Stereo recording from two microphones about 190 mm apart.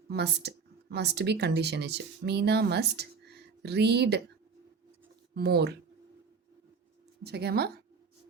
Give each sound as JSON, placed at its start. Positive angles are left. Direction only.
{"t": 0.1, "sound": "speech", "side_deg": -60}
{"t": 5.3, "sound": "speech", "side_deg": -60}
{"t": 7.2, "sound": "speech", "side_deg": -60}